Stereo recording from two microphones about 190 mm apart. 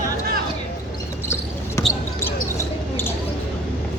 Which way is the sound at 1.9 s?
15° left (ahead or behind).